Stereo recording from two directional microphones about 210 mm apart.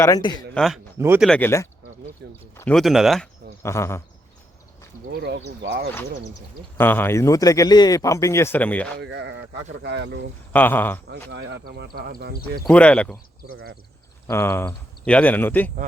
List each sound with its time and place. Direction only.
0.0 s speech: 20° left (ahead or behind)
0.5 s speech: centre (ahead or behind)
0.9 s speech: 10° right (ahead or behind)
1.2 s a man's voice: 5° left (ahead or behind)
2.2 s speech: 55° right (ahead or behind)
2.6 s speech: 5° left (ahead or behind)
3.6 s a man's voice: 10° left (ahead or behind)
5.2 s speech: 50° right (ahead or behind)
5.9 s a man's voice: 10° left (ahead or behind)
9.0 s speech: 55° right (ahead or behind)
10.5 s a man's voice: 10° left (ahead or behind)
11.3 s speech: 55° right (ahead or behind)
12.6 s speech: 5° left (ahead or behind)
14.3 s a man's voice: 10° left (ahead or behind)